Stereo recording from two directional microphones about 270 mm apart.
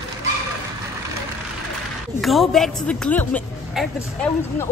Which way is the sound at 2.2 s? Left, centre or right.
Centre.